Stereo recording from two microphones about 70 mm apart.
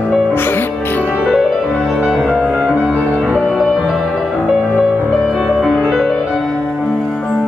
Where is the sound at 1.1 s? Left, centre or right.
Centre.